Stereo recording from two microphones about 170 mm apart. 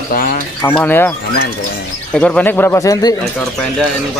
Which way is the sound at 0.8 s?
10° left (ahead or behind).